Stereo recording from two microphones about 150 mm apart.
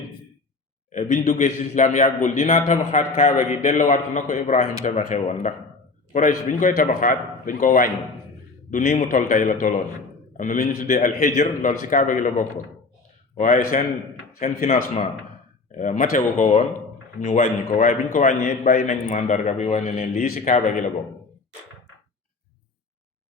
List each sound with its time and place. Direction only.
0.9 s a man's voice: 55° left (ahead or behind)
9.0 s a man's voice: 65° left (ahead or behind)
15.7 s a man's voice: 60° left (ahead or behind); by 18.8 s 80° left
18.8 s a man's voice: 50° left (ahead or behind)
19.8 s a man's voice: 75° left (ahead or behind)
20.5 s a man's voice: 55° left (ahead or behind)